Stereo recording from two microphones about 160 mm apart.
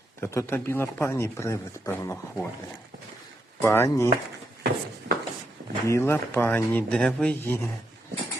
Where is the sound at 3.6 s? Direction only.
15° left (ahead or behind).